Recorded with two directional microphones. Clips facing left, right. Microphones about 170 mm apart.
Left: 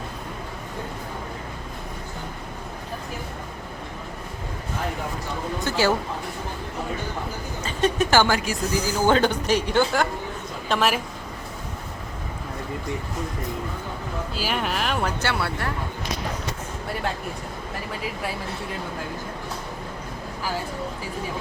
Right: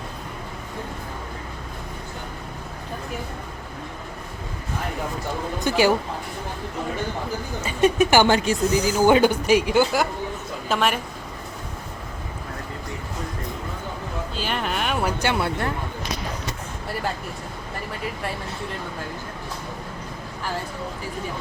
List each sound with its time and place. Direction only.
5.6 s speech: 15° right (ahead or behind)
7.6 s speech: 10° right (ahead or behind)
10.7 s speech: centre (ahead or behind)
14.3 s speech: 5° left (ahead or behind)
15.2 s speech: 20° right (ahead or behind)